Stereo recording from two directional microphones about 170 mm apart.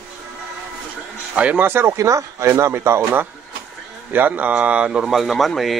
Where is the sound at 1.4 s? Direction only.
10° right (ahead or behind).